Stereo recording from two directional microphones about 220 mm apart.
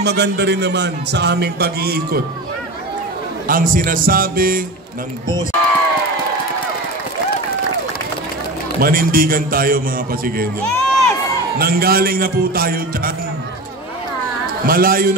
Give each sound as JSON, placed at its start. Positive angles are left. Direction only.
{"t": 0.0, "sound": "a man's voice", "side_deg": -50}
{"t": 3.4, "sound": "a man's voice", "side_deg": -40}
{"t": 8.7, "sound": "a man's voice", "side_deg": -40}
{"t": 10.8, "sound": "crowd", "side_deg": 0}
{"t": 11.5, "sound": "a man's voice", "side_deg": -45}
{"t": 14.7, "sound": "a man's voice", "side_deg": -40}